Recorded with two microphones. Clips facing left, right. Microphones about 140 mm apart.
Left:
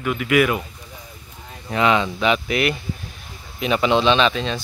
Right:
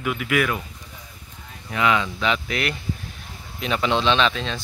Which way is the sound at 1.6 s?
30° left (ahead or behind).